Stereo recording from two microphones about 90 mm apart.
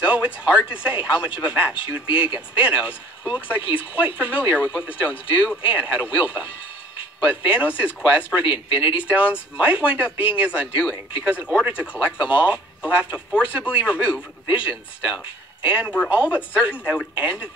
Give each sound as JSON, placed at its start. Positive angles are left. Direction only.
{"t": 0.0, "sound": "speech", "side_deg": -15}